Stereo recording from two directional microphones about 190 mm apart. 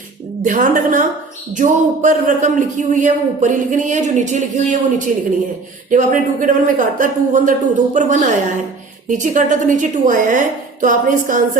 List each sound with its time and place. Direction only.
0.4 s a woman's voice: 45° right (ahead or behind)